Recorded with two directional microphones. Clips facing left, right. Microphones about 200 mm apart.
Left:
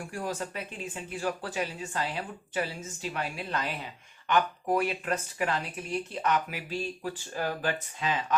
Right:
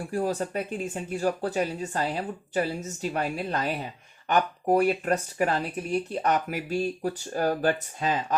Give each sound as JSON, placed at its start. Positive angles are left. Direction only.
{"t": 0.0, "sound": "speech", "side_deg": -35}